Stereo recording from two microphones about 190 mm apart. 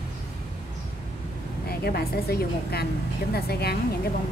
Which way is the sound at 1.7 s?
55° left (ahead or behind).